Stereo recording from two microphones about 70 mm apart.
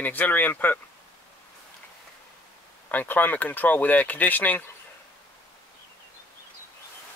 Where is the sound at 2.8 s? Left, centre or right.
Left.